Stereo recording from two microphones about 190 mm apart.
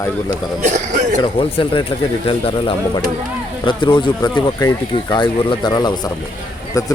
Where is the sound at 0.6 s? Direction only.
40° right (ahead or behind).